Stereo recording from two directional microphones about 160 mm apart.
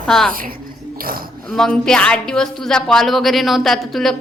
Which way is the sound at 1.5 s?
5° left (ahead or behind).